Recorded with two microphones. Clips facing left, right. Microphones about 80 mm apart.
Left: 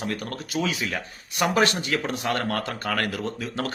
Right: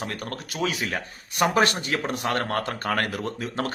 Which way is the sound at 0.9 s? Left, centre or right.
Right.